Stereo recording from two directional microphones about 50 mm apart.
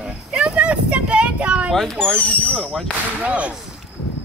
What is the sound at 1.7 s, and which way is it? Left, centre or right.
Speech, centre.